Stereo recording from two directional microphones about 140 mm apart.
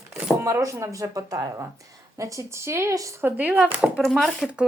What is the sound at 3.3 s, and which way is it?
Speech, 10° right (ahead or behind).